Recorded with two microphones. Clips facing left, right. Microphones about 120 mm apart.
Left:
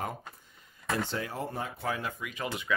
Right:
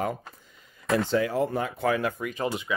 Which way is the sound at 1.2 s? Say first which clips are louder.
Right 9 dB; 90° right.